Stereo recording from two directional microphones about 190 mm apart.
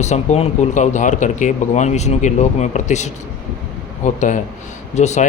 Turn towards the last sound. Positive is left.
turn(degrees=35)  # may be behind; listen again after turning